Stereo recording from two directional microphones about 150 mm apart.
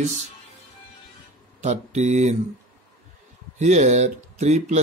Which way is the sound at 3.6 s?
55° right (ahead or behind).